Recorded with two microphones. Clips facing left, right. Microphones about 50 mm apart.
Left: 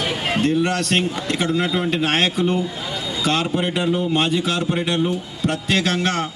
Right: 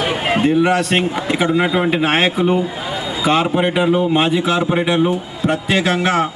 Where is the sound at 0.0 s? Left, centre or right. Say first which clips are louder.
Right 4 dB; centre.